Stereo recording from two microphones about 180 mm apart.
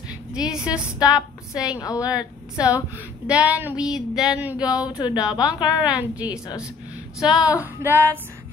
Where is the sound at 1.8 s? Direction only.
20° left (ahead or behind).